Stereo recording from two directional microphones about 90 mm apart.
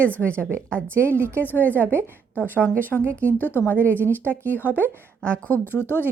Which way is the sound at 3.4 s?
25° left (ahead or behind).